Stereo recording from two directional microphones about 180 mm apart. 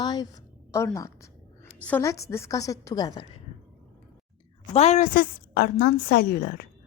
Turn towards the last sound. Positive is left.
turn(degrees=60)  # may be behind; listen again after turning